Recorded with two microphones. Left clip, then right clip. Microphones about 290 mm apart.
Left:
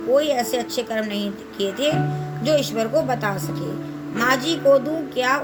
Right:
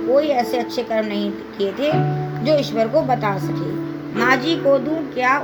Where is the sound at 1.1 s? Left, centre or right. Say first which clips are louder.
Right 3 dB; left.